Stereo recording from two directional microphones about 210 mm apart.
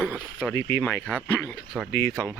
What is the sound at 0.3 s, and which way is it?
Speech, 5° left (ahead or behind).